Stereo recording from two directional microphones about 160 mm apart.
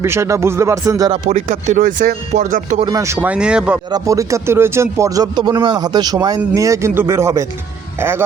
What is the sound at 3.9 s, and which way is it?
A man's voice, 20° right (ahead or behind).